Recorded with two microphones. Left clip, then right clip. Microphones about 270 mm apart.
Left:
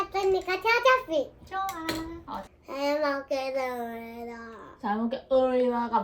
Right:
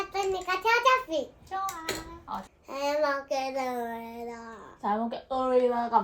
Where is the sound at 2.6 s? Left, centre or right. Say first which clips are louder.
Even; centre.